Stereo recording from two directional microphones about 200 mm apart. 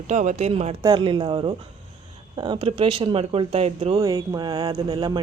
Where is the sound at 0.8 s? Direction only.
20° right (ahead or behind).